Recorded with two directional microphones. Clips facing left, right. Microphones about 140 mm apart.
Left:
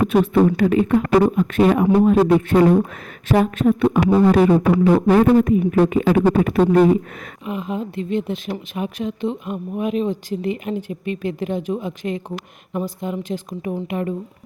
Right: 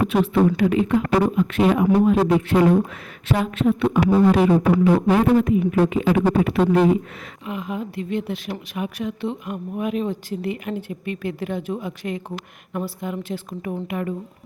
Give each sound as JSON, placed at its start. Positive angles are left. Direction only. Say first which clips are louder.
{"t": 0.1, "sound": "a woman's voice", "louder": "left 3 dB", "side_deg": 45}
{"t": 7.4, "sound": "a woman's voice", "louder": "left 3 dB", "side_deg": 25}